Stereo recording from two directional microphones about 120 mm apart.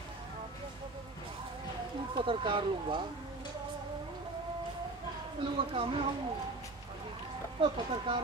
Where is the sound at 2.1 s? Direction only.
45° right (ahead or behind).